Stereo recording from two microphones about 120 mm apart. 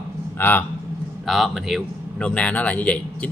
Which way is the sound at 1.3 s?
Centre (ahead or behind).